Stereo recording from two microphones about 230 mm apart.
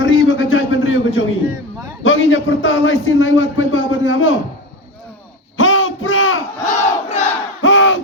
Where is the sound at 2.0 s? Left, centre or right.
Left.